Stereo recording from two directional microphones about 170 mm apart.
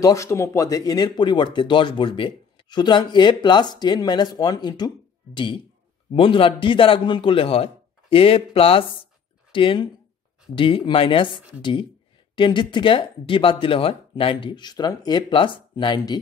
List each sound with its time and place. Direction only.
0.0 s a man's voice: 20° left (ahead or behind)
12.4 s speech: 30° left (ahead or behind)